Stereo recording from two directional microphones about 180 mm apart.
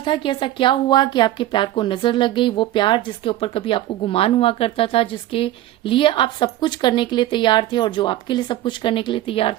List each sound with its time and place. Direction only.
0.0 s a woman's voice: 25° left (ahead or behind)